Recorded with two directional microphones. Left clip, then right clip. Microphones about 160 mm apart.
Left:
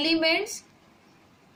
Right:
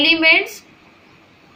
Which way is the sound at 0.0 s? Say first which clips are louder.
Right 11 dB; 60° left (ahead or behind).